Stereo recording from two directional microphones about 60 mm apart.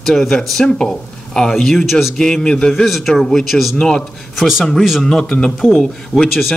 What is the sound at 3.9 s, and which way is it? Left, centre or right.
Speech, centre.